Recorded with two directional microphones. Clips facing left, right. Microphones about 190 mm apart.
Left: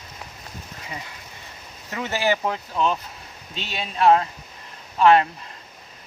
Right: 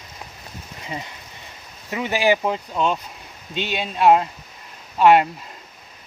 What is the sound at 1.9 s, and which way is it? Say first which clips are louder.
Speech: right 4 dB; 15° right (ahead or behind).